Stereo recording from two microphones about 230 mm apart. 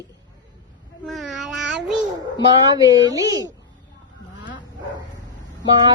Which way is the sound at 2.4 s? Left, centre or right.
Centre.